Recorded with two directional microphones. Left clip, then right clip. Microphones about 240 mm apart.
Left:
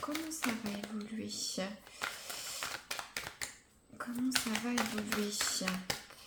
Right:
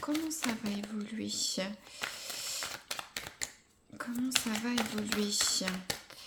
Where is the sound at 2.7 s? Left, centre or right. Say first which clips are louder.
Right 1 dB; centre.